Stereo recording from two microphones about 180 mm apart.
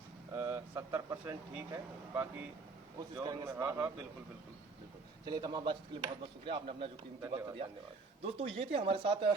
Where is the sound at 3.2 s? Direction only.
20° right (ahead or behind).